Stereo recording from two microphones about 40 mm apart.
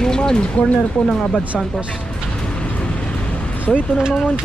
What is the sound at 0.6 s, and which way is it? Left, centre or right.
Speech, left.